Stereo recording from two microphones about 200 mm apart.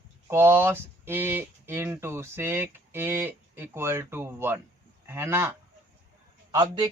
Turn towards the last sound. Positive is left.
turn(degrees=-20)  # may be behind; listen again after turning